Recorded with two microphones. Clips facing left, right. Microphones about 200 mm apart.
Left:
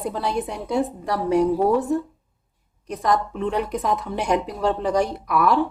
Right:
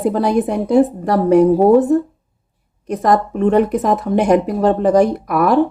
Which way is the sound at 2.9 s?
55° right (ahead or behind).